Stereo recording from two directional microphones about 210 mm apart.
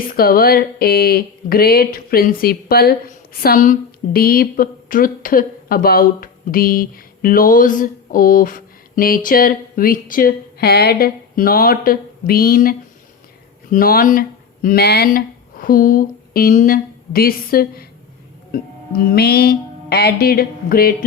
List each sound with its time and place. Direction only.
0.1 s a woman's voice: 45° left (ahead or behind)